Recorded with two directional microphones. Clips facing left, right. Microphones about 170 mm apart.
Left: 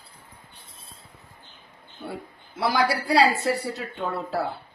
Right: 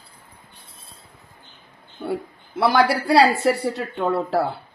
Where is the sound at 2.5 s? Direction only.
65° right (ahead or behind).